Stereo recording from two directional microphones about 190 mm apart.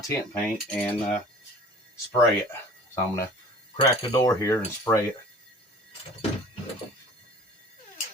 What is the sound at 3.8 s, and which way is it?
Cutlery, 20° left (ahead or behind).